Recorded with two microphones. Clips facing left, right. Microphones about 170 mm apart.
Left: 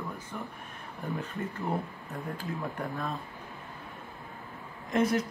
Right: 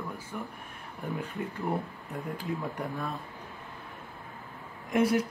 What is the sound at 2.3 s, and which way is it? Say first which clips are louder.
Speech: right 2 dB; 15° right (ahead or behind).